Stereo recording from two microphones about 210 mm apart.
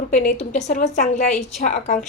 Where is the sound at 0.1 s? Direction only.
35° left (ahead or behind).